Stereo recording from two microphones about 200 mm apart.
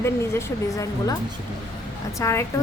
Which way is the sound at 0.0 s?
10° left (ahead or behind).